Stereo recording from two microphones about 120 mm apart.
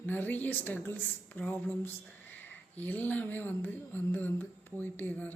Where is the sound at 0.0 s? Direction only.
15° left (ahead or behind).